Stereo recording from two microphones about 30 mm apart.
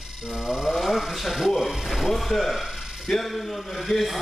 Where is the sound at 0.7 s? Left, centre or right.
Centre.